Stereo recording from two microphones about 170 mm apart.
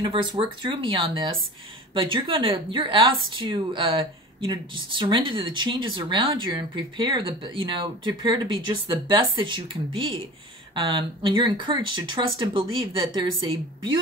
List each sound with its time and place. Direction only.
0.0 s speech: 25° right (ahead or behind)